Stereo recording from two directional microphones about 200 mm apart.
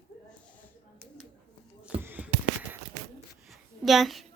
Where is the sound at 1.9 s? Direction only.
10° right (ahead or behind).